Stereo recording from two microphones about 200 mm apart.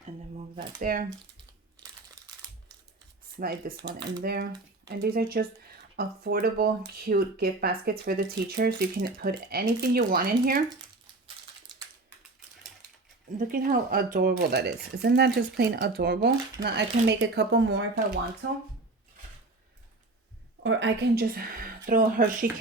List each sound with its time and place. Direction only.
0.3 s speech: 35° right (ahead or behind)
3.4 s speech: 50° right (ahead or behind)
13.5 s speech: 45° right (ahead or behind)
20.7 s speech: 65° right (ahead or behind); by 22.4 s 45° right (ahead or behind)